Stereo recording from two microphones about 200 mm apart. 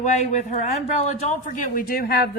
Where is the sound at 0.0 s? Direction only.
35° left (ahead or behind).